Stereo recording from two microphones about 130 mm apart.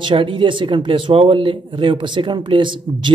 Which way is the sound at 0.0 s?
40° right (ahead or behind).